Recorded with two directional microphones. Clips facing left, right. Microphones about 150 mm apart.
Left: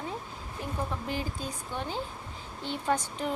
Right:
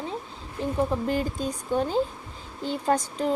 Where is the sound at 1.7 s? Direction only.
40° right (ahead or behind).